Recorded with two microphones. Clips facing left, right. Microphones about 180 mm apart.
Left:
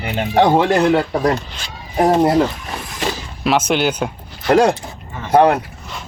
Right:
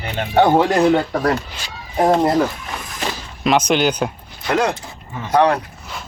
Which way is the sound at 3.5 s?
5° left (ahead or behind).